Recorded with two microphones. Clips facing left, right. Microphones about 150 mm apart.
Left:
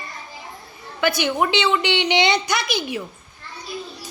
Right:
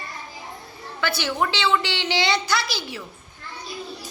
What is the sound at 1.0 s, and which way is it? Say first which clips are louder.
A woman's voice: left 4 dB; 15° left (ahead or behind).